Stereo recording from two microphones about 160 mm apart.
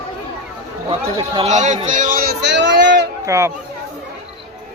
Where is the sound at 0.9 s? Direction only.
35° right (ahead or behind).